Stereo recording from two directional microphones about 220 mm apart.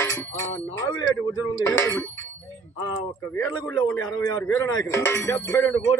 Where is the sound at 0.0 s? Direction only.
10° left (ahead or behind).